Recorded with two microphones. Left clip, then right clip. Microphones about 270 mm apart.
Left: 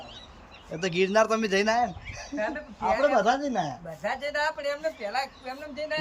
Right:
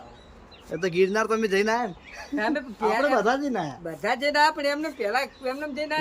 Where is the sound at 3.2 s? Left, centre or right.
Centre.